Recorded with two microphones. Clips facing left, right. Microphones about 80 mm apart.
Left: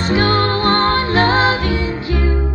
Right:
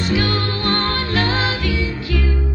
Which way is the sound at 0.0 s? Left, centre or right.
Left.